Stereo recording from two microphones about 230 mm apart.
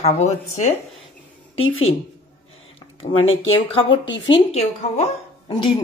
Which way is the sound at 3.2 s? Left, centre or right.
Left.